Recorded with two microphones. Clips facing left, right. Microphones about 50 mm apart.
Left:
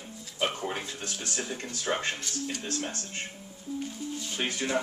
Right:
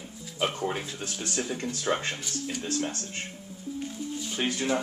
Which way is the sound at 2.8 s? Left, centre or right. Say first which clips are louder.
Right 4 dB; left.